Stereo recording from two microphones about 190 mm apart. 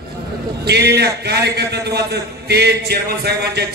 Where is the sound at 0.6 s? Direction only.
60° right (ahead or behind).